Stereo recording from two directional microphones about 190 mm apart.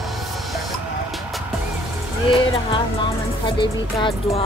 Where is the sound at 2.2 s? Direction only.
25° left (ahead or behind).